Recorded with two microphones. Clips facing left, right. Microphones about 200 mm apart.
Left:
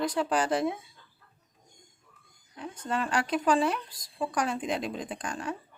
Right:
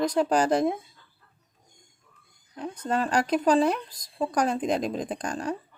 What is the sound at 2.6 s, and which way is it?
Speech, 40° right (ahead or behind).